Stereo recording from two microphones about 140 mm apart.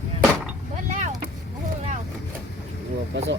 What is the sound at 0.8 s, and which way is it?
Speech, 60° right (ahead or behind).